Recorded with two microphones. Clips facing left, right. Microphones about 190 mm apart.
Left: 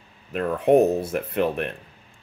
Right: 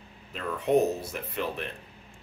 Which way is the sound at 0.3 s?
55° left (ahead or behind).